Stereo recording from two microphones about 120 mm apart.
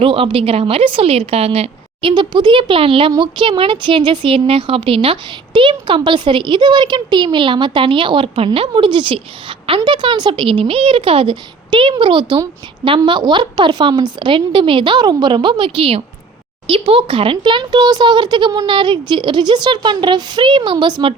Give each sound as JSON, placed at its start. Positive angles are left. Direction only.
{"t": 0.0, "sound": "a woman's voice", "side_deg": -50}